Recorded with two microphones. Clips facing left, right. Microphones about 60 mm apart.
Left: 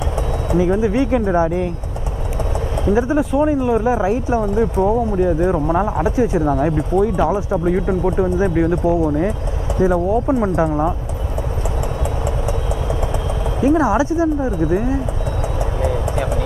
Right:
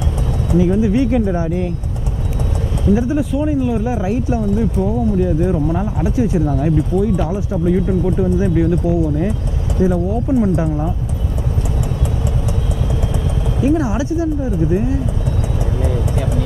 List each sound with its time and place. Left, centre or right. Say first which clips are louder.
0.6 s speech: right 2 dB; left
2.9 s speech: even; left
5.4 s speech: left 1 dB; left
6.0 s speech: left 1 dB; left
13.6 s speech: left 2 dB; left
15.8 s vehicle: left 2 dB; centre